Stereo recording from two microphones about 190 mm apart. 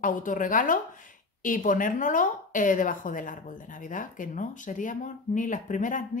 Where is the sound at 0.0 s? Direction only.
45° left (ahead or behind).